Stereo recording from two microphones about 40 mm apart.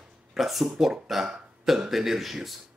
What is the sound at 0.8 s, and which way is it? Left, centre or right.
Speech, centre.